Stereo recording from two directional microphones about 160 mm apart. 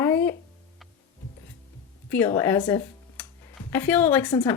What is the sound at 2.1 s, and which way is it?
Speech, 15° left (ahead or behind).